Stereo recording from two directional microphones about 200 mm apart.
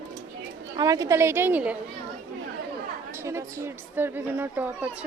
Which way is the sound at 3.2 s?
15° right (ahead or behind).